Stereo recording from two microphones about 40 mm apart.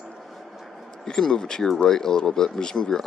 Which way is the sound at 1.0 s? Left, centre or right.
Centre.